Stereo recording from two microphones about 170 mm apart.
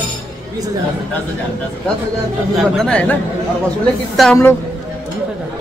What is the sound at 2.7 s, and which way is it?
Speech, 5° left (ahead or behind).